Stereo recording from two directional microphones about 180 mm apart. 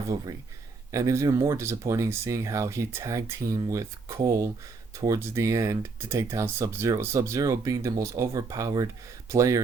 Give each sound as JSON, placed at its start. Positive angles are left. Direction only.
{"t": 0.9, "sound": "speech", "side_deg": -20}